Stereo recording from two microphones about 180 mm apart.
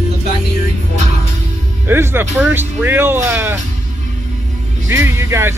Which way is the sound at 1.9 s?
15° right (ahead or behind).